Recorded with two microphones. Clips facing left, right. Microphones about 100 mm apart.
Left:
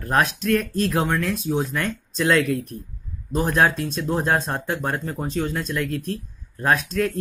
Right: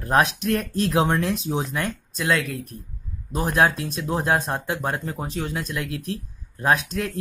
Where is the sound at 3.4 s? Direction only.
20° right (ahead or behind).